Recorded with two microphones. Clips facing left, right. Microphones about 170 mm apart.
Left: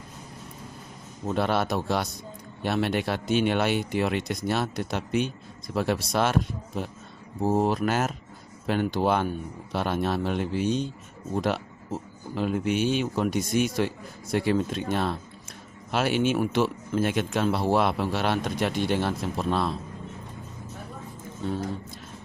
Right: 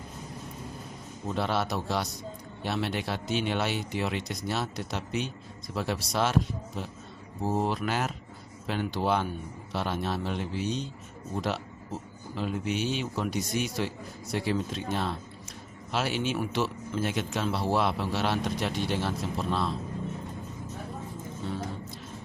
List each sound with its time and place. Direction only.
1.3 s a man's voice: 55° left (ahead or behind)